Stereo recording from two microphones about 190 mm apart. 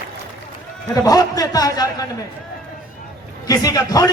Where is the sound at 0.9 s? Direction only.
20° left (ahead or behind).